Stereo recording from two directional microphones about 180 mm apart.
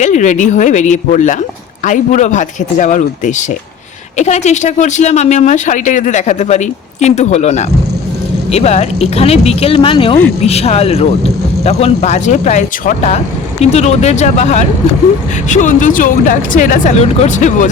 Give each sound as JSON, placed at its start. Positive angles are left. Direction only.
{"t": 0.0, "sound": "speech", "side_deg": 40}